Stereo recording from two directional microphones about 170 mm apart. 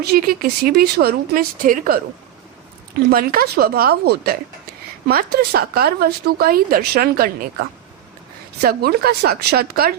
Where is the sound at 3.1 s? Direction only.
60° right (ahead or behind).